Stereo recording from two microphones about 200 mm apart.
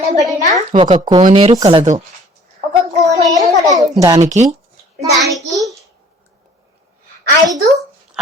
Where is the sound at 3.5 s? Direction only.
35° right (ahead or behind).